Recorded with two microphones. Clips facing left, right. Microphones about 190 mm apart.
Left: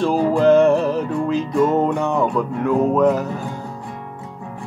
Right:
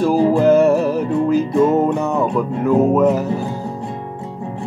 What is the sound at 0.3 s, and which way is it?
Music, 5° right (ahead or behind).